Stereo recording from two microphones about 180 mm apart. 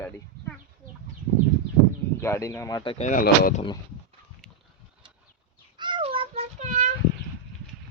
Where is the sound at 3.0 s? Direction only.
50° left (ahead or behind).